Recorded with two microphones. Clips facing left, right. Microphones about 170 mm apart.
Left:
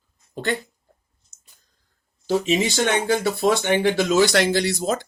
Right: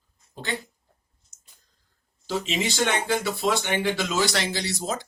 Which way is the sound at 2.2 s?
45° left (ahead or behind).